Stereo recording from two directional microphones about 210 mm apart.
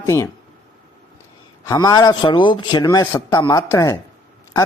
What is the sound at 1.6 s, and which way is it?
Speech, 15° left (ahead or behind).